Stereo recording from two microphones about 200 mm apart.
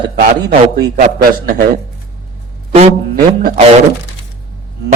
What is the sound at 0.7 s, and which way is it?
Speech, 50° right (ahead or behind).